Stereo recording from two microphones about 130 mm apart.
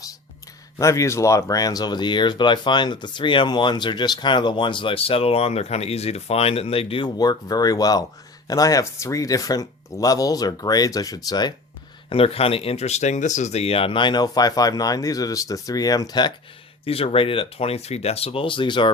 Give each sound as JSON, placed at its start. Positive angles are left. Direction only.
{"t": 0.8, "sound": "speech", "side_deg": 25}
{"t": 12.0, "sound": "speech", "side_deg": 45}
{"t": 16.8, "sound": "speech", "side_deg": 50}